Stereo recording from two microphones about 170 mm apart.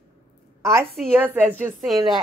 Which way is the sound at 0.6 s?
15° right (ahead or behind).